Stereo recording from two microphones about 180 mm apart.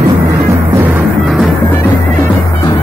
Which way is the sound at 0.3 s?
15° right (ahead or behind).